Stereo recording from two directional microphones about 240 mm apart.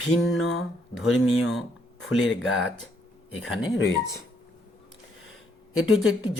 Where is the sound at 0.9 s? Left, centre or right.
Centre.